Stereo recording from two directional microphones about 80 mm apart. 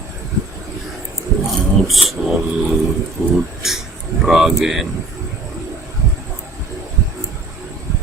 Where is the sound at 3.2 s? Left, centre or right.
Centre.